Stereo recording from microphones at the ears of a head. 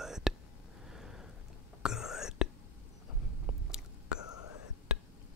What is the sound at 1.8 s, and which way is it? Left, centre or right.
Whispering, left.